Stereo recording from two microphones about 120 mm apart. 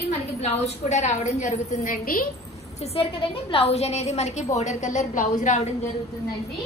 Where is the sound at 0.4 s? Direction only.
70° left (ahead or behind).